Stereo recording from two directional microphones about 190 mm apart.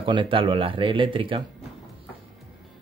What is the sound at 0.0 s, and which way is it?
Speech, 25° right (ahead or behind).